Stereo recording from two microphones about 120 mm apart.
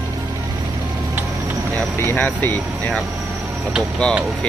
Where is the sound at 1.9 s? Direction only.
20° left (ahead or behind).